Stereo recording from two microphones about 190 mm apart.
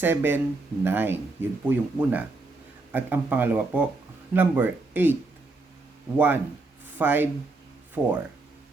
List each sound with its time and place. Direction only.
0.0 s speech: 10° right (ahead or behind)
6.1 s speech: 10° right (ahead or behind)